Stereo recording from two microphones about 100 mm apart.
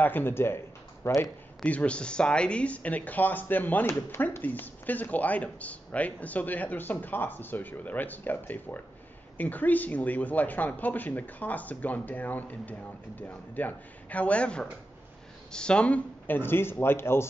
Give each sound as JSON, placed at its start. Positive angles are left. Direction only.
{"t": 0.0, "sound": "speech", "side_deg": 20}
{"t": 1.6, "sound": "speech", "side_deg": 10}